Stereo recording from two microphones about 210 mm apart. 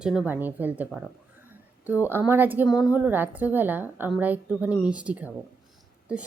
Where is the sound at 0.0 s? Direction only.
5° right (ahead or behind).